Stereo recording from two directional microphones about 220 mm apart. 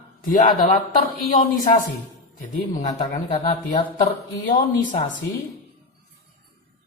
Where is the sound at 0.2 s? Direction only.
40° left (ahead or behind).